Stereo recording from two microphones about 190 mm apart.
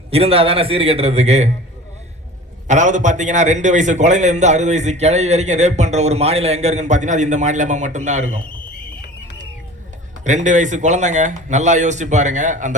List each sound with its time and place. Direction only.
0.1 s a man's voice: 30° right (ahead or behind)
2.6 s a man's voice: 40° right (ahead or behind)
10.2 s a man's voice: 40° right (ahead or behind)